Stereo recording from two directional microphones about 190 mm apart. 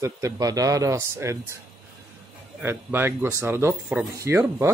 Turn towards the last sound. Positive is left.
turn(degrees=-15)  # may be behind; listen again after turning